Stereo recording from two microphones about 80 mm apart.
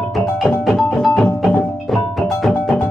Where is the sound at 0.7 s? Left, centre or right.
Centre.